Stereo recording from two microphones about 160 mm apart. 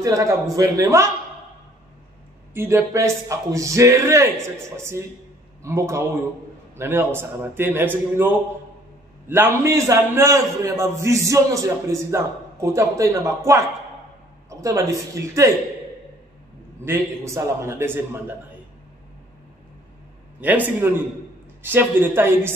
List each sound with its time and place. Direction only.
0.0 s a man's voice: 20° right (ahead or behind)
2.5 s a man's voice: 15° right (ahead or behind)
16.8 s a man's voice: 15° right (ahead or behind)
20.3 s a man's voice: 10° right (ahead or behind)